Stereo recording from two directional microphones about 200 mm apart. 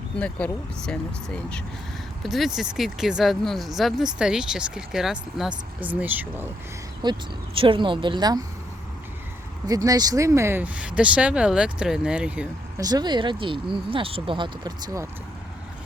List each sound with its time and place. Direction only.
0.2 s speech: 5° left (ahead or behind)
7.0 s speech: 25° right (ahead or behind)
9.6 s speech: 20° right (ahead or behind)
12.8 s speech: 20° right (ahead or behind)